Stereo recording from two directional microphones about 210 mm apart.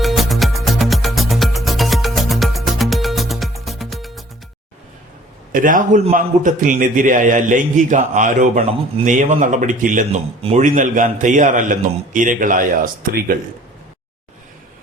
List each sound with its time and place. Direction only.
0.0 s music: centre (ahead or behind)
5.5 s a man's voice: 40° right (ahead or behind)